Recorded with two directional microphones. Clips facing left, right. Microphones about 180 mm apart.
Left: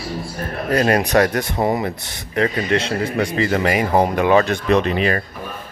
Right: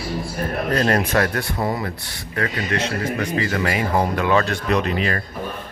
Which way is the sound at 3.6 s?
15° left (ahead or behind).